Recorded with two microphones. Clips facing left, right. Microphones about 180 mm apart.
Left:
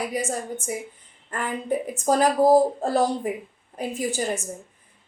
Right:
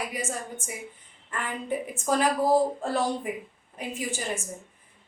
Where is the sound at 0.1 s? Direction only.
40° left (ahead or behind).